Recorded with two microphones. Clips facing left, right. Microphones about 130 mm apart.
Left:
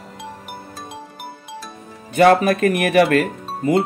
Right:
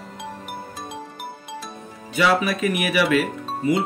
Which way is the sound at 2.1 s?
50° left (ahead or behind).